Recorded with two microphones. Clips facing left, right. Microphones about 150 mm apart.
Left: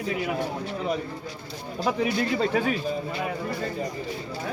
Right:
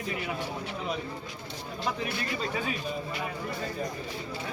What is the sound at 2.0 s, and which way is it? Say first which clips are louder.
Speech: left 9 dB; 85° left.